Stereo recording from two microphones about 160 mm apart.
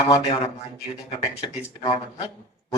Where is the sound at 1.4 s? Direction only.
30° left (ahead or behind).